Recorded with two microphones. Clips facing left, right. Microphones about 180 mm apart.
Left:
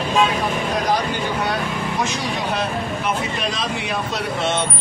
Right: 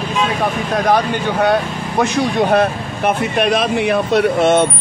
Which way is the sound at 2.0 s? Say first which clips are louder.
Right 13 dB; 55° right (ahead or behind).